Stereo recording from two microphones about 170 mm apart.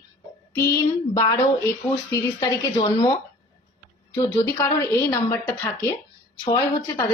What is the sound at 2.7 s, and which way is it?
Speech, 25° left (ahead or behind).